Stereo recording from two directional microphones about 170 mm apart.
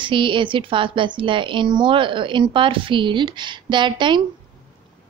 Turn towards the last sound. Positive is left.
turn(degrees=-25)  # may be behind; listen again after turning